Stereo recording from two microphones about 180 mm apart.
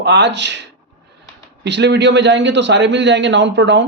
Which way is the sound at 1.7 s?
75° right (ahead or behind).